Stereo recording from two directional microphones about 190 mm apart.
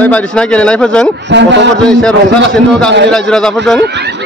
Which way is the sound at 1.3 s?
65° right (ahead or behind).